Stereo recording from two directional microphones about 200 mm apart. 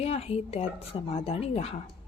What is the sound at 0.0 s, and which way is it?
Speech, 30° left (ahead or behind).